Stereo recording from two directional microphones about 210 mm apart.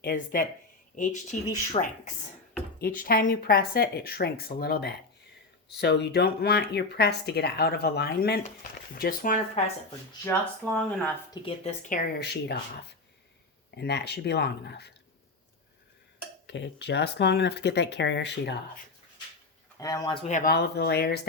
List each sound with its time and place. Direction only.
0.0 s speech: 45° left (ahead or behind)
10.7 s speech: 5° left (ahead or behind)
11.4 s speech: 35° left (ahead or behind)
12.2 s speech: 55° left (ahead or behind)
16.5 s speech: 55° left (ahead or behind)
19.8 s speech: 15° left (ahead or behind)
20.2 s speech: 40° left (ahead or behind)